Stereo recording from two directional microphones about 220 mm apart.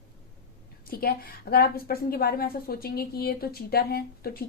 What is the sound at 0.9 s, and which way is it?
A woman's voice, 45° left (ahead or behind).